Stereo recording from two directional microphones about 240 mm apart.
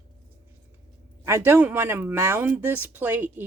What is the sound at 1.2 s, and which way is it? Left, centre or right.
Speech, centre.